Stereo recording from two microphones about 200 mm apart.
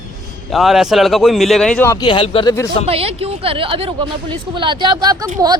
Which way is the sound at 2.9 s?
30° right (ahead or behind).